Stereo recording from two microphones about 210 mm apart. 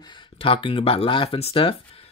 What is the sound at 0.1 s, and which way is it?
Speech, 25° left (ahead or behind).